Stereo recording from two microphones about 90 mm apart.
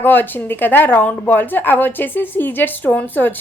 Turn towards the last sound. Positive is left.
turn(degrees=20)  # may be behind; listen again after turning